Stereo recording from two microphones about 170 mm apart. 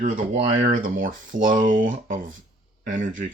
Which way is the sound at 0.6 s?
50° right (ahead or behind).